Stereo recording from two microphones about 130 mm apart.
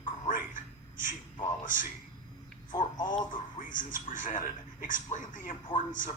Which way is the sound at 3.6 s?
90° left.